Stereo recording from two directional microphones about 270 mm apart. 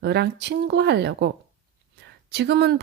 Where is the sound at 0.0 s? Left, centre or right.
Right.